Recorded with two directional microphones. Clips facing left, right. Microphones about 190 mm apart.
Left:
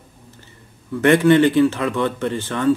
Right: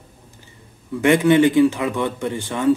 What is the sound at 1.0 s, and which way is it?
Speech, 15° right (ahead or behind).